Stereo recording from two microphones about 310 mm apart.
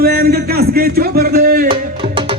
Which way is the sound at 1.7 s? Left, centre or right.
Centre.